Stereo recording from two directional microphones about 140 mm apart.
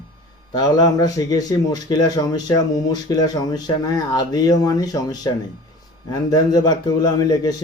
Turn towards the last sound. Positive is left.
turn(degrees=30)  # may be behind; listen again after turning